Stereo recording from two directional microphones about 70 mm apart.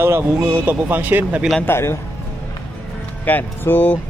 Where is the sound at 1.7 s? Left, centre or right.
Left.